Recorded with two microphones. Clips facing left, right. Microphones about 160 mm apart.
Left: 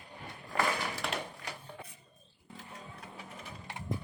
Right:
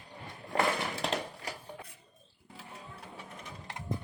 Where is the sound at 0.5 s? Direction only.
25° right (ahead or behind).